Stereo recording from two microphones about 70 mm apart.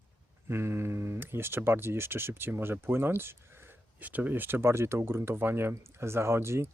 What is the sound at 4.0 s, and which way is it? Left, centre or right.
Speech, right.